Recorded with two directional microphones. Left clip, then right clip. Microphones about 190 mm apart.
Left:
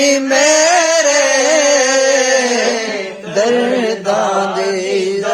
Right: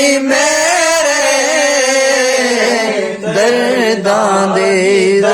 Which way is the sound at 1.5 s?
20° left (ahead or behind).